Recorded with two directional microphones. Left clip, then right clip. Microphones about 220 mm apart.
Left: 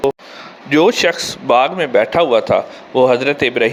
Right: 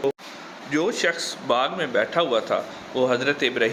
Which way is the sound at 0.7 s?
30° left (ahead or behind).